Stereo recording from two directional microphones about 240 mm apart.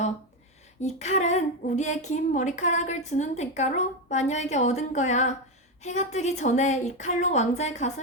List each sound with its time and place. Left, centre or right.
0.8 s speech: left